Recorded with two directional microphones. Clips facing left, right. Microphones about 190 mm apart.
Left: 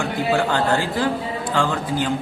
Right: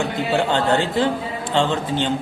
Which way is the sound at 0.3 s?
25° right (ahead or behind).